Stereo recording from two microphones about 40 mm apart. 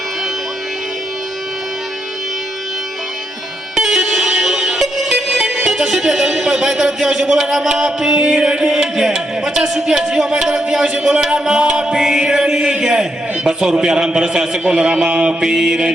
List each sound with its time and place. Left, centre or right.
3.8 s music: centre
15.4 s mantra: centre